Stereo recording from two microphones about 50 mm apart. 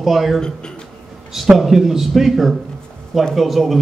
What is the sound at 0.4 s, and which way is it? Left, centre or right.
Speech, centre.